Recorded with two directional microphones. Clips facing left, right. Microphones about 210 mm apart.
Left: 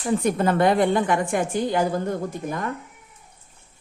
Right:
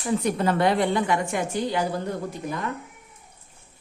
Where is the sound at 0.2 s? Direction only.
50° left (ahead or behind).